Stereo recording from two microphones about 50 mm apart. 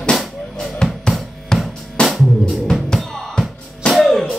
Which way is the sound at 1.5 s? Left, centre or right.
Centre.